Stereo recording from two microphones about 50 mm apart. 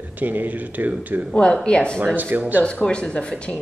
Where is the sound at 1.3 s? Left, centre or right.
Left.